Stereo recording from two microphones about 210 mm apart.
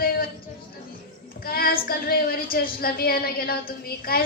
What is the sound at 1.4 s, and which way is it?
A man's voice, 45° left (ahead or behind).